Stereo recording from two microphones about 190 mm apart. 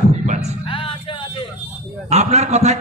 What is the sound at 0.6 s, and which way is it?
Music, 30° left (ahead or behind).